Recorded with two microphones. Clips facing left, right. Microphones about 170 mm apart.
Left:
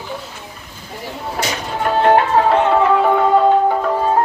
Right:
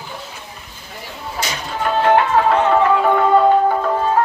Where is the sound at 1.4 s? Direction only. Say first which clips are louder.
Left 2 dB; 50° left (ahead or behind).